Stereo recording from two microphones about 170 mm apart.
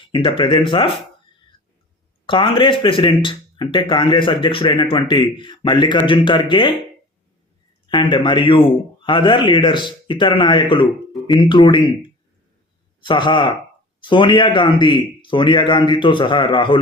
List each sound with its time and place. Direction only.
0.1 s speech: 30° left (ahead or behind)
2.2 s speech: 30° left (ahead or behind)
7.9 s speech: 25° left (ahead or behind)